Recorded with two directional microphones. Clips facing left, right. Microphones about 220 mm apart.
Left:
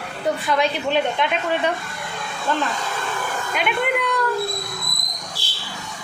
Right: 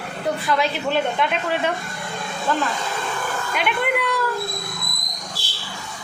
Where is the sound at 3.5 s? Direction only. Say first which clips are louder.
Left 1 dB; centre (ahead or behind).